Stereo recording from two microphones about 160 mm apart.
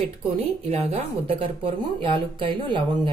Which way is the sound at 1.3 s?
35° right (ahead or behind).